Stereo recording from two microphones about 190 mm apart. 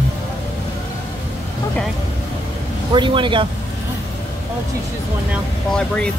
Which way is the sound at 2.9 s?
25° right (ahead or behind).